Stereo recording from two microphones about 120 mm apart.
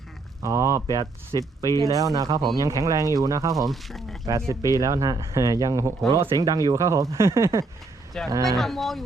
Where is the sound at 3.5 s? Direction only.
Centre (ahead or behind).